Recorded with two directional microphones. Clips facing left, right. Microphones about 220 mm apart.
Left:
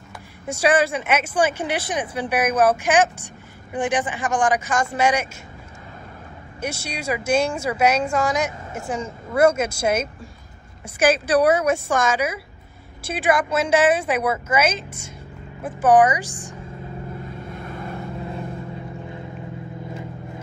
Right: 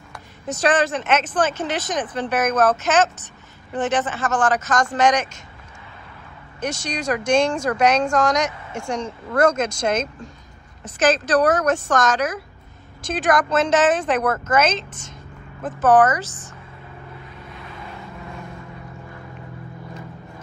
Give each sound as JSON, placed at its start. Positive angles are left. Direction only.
{"t": 0.1, "sound": "speech", "side_deg": 10}
{"t": 6.6, "sound": "speech", "side_deg": 10}
{"t": 17.5, "sound": "vehicle", "side_deg": 50}
{"t": 18.2, "sound": "vehicle", "side_deg": 30}